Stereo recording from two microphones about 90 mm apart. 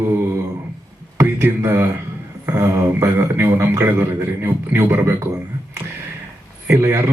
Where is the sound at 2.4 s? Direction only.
35° right (ahead or behind).